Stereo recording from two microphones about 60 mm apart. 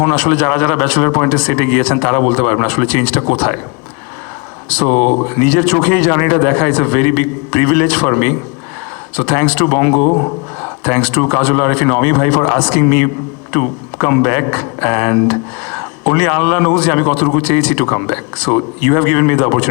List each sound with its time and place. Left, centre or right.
0.2 s a man's voice: centre
4.7 s a man's voice: left
10.1 s speech: left
10.6 s a sound: left
11.2 s a man's voice: left
12.5 s speech: centre
12.8 s a man's voice: left